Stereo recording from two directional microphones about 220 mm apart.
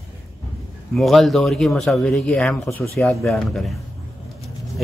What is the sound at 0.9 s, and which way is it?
Speech, centre (ahead or behind).